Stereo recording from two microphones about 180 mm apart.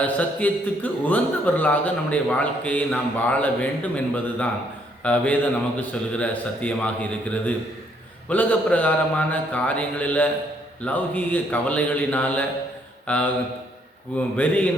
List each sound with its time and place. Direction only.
0.0 s a man's voice: 10° left (ahead or behind)
14.3 s a man's voice: 10° left (ahead or behind)